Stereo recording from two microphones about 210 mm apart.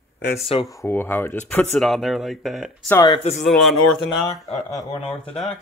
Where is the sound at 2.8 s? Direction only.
15° left (ahead or behind).